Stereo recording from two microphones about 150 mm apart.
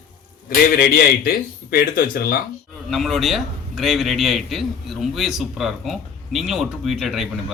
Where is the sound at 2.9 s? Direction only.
Centre (ahead or behind).